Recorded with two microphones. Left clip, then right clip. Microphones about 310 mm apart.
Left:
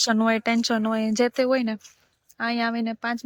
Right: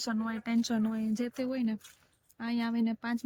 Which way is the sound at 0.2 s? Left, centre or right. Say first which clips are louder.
Left 15 dB; left.